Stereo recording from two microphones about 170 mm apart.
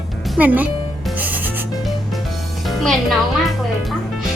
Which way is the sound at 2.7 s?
Centre (ahead or behind).